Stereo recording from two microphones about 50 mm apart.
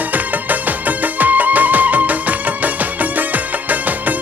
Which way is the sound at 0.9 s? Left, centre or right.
Right.